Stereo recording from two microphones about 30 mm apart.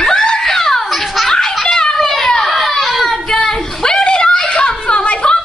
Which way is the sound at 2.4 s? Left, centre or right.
Centre.